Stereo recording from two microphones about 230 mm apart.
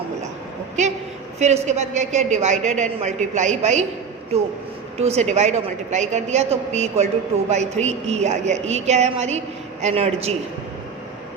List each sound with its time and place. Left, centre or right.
0.8 s a woman's voice: right
4.9 s a woman's voice: right